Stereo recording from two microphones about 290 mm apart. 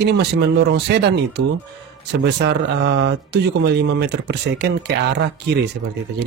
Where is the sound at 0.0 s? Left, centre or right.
Right.